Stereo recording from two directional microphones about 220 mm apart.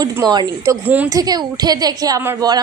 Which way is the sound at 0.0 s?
20° right (ahead or behind).